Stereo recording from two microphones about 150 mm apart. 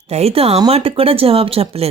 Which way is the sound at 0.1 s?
45° right (ahead or behind).